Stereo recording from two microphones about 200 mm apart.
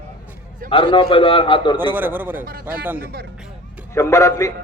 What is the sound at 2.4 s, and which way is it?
Speech, 45° right (ahead or behind).